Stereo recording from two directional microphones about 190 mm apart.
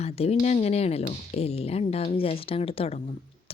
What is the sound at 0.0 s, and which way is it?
Speech, 35° left (ahead or behind).